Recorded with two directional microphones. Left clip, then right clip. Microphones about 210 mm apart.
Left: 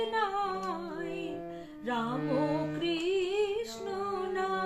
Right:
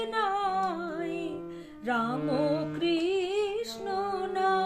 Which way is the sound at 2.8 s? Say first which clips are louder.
Right 2 dB; 55° right (ahead or behind).